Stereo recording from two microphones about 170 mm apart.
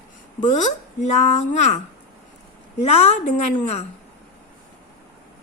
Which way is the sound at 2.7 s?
40° left (ahead or behind).